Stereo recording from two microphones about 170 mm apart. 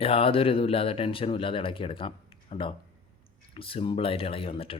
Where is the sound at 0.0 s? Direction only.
35° left (ahead or behind).